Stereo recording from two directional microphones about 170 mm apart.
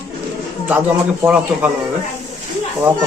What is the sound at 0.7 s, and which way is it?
Speech, 10° right (ahead or behind).